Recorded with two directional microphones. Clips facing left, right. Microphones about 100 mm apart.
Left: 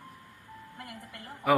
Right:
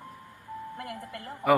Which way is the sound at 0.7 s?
50° right (ahead or behind).